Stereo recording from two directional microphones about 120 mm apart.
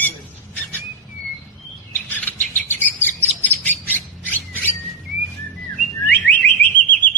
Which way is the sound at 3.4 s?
15° left (ahead or behind).